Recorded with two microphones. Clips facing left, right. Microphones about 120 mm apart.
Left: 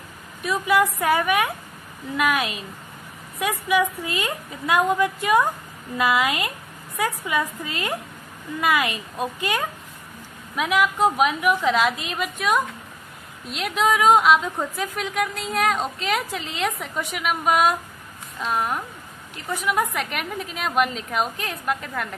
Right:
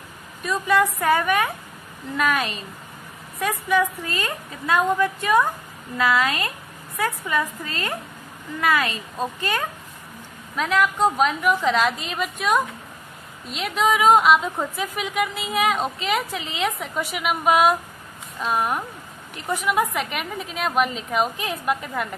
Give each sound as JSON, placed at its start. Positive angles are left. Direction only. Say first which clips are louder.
{"t": 0.4, "sound": "a woman's voice", "louder": "even", "side_deg": 5}